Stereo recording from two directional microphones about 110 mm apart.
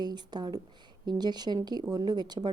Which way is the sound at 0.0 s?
40° right (ahead or behind).